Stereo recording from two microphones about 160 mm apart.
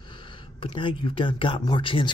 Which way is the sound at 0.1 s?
30° left (ahead or behind).